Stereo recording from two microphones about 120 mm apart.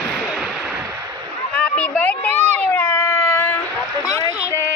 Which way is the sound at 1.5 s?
10° left (ahead or behind).